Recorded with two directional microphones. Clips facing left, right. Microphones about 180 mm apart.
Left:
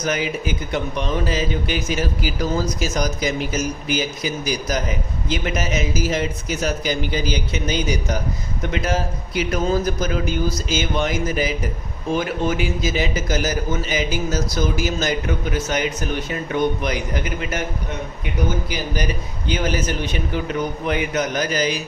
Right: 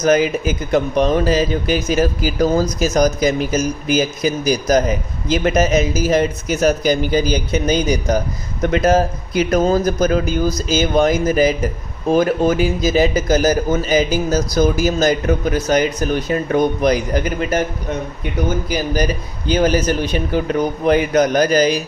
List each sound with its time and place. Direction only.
0.0 s a man's voice: 45° right (ahead or behind)
18.7 s a man's voice: 40° right (ahead or behind)